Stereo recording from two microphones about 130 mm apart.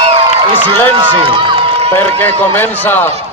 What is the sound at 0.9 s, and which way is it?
Run, 40° right (ahead or behind).